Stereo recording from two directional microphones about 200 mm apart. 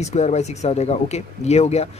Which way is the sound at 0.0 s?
35° left (ahead or behind).